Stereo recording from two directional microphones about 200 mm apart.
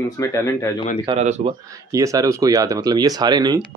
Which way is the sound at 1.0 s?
30° right (ahead or behind).